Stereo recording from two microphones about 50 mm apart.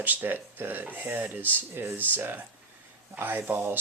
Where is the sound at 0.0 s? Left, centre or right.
Right.